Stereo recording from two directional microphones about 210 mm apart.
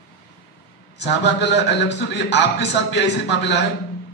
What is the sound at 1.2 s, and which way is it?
A man's voice, 55° left (ahead or behind).